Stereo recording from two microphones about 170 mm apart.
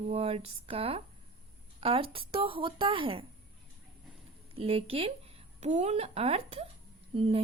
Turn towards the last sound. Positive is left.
turn(degrees=-35)  # may be behind; listen again after turning